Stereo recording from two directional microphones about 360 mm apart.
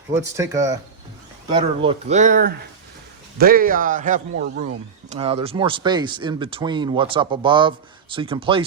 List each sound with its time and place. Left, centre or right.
0.1 s a man's voice: centre